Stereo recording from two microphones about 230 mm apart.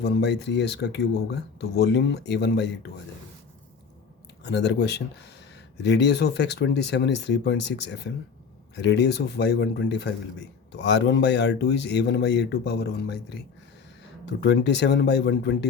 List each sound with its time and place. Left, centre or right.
0.0 s speech: left
4.4 s speech: left